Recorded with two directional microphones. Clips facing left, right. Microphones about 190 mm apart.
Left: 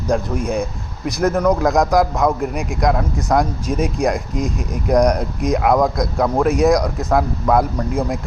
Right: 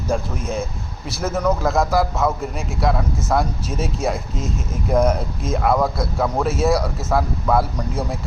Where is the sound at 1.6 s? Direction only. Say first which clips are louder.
Left 4 dB; 15° left (ahead or behind).